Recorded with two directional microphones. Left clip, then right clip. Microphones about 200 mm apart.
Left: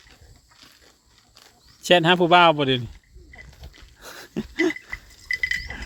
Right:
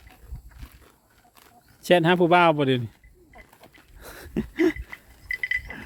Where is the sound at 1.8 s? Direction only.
Centre (ahead or behind).